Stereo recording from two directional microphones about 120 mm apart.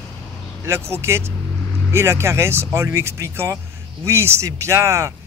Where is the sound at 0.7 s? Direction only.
20° right (ahead or behind).